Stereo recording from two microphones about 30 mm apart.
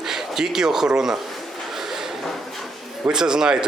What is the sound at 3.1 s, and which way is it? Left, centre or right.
Speech, right.